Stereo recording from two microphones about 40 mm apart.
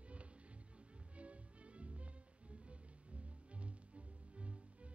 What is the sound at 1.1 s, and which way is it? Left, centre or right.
Music, right.